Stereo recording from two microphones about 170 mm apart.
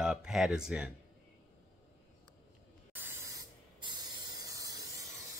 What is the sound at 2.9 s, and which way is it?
Spray, 10° right (ahead or behind).